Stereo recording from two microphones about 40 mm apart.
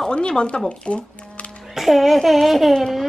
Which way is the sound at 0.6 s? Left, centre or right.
Left.